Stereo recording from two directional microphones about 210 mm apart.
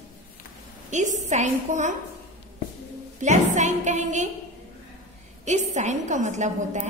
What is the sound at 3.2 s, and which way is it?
A woman's voice, 35° right (ahead or behind).